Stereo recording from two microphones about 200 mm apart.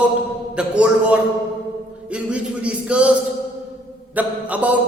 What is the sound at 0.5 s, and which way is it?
Speech, 5° right (ahead or behind).